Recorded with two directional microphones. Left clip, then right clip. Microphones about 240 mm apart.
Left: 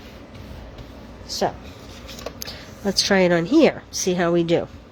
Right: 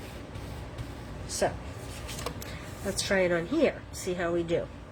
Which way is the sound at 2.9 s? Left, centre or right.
Left.